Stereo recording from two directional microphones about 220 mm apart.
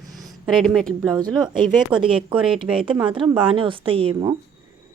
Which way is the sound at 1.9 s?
25° right (ahead or behind).